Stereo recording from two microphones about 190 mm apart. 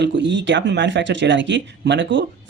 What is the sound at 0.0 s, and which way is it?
Speech, 70° right (ahead or behind).